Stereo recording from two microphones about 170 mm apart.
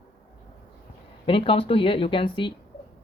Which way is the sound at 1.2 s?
30° left (ahead or behind).